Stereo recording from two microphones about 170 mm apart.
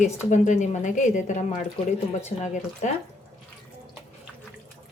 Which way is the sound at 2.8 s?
45° left (ahead or behind).